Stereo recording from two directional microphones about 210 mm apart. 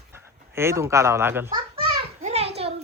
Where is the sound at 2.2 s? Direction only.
30° right (ahead or behind).